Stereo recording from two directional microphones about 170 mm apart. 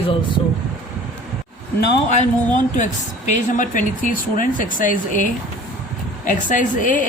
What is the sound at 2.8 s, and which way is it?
Speech, 45° left (ahead or behind).